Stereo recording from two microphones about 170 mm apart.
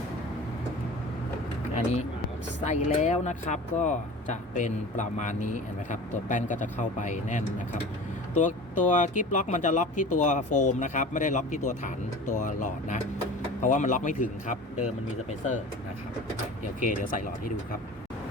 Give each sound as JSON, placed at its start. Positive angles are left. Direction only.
{"t": 1.7, "sound": "speech", "side_deg": 40}
{"t": 16.8, "sound": "speech", "side_deg": 50}